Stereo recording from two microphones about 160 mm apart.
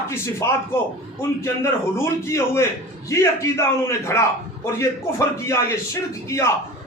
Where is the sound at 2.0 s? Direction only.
15° left (ahead or behind).